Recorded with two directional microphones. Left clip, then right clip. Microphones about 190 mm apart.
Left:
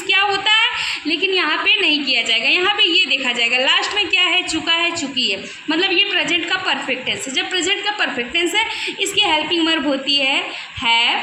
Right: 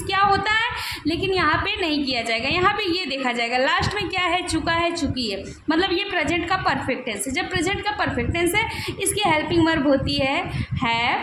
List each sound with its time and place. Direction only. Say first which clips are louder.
0.1 s a woman's voice: left 4 dB; 65° right (ahead or behind)